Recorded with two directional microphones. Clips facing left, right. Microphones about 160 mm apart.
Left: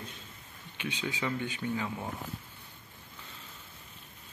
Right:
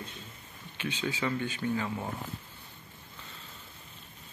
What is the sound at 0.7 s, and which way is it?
Speech, 15° left (ahead or behind).